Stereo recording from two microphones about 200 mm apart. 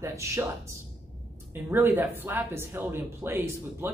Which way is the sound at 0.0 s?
15° right (ahead or behind).